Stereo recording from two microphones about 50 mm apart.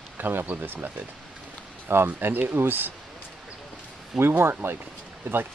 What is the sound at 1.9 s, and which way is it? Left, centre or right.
Speech, right.